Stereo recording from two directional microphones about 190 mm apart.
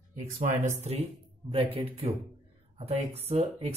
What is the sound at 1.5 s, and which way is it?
Speech, 30° right (ahead or behind).